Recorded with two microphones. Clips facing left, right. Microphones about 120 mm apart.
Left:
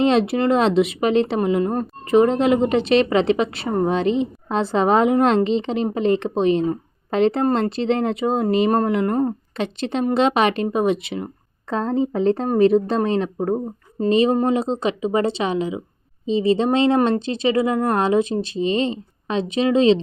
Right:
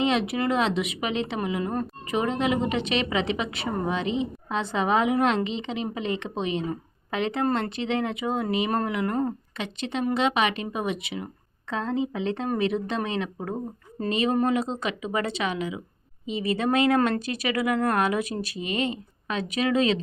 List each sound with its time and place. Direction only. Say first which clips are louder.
0.0 s a woman's voice: left 7 dB; 35° left (ahead or behind)